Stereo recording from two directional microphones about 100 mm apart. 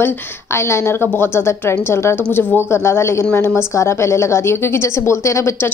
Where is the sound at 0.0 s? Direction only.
25° left (ahead or behind).